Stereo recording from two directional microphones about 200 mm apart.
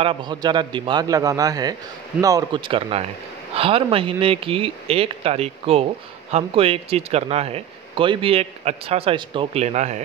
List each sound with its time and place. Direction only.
0.0 s speech: 25° right (ahead or behind)